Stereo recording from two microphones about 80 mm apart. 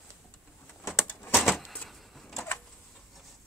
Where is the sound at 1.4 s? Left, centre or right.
Centre.